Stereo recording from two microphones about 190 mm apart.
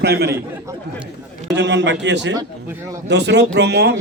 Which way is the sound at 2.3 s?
15° right (ahead or behind).